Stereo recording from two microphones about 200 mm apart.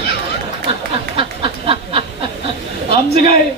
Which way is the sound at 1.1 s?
30° right (ahead or behind).